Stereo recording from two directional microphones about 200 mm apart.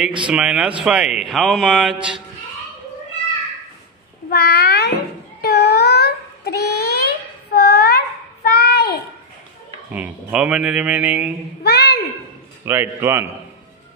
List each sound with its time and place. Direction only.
0.3 s speech: 5° right (ahead or behind)
4.3 s a child's voice: 50° left (ahead or behind)
5.4 s a sound: 55° left (ahead or behind)
8.5 s child singing: 50° left (ahead or behind)
9.9 s speech: 5° right (ahead or behind)
11.6 s a sound: 55° left (ahead or behind)
12.6 s a man's voice: 10° right (ahead or behind)